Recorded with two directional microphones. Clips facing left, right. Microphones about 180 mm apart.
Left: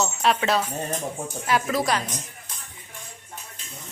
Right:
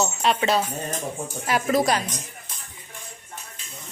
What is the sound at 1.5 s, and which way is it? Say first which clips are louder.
Speech: even; 35° right (ahead or behind).